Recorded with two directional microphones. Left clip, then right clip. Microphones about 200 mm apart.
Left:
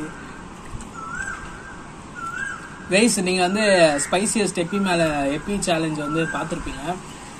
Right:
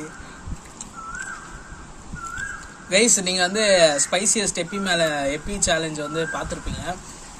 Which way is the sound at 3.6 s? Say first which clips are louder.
Even; 35° right (ahead or behind).